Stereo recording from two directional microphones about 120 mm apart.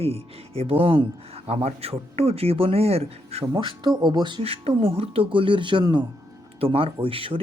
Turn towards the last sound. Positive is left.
turn(degrees=-50)  # may be behind; listen again after turning